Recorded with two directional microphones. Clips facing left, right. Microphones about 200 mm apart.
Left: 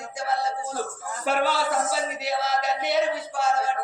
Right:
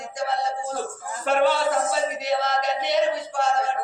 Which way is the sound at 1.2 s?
5° left (ahead or behind).